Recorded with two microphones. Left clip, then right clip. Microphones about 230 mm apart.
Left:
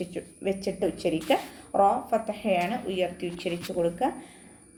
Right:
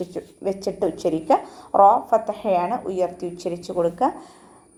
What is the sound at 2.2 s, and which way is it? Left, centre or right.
A woman's voice, centre.